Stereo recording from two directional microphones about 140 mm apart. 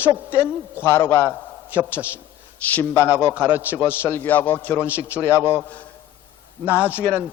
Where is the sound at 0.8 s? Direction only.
20° left (ahead or behind).